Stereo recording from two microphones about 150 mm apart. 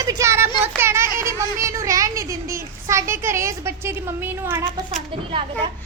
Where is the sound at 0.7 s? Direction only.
15° right (ahead or behind).